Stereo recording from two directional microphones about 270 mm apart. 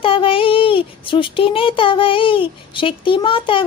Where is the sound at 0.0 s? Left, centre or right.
Centre.